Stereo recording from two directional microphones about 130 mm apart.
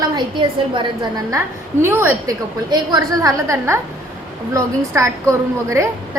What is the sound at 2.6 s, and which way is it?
A woman's voice, 30° right (ahead or behind).